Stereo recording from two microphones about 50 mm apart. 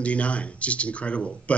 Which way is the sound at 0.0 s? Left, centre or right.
Left.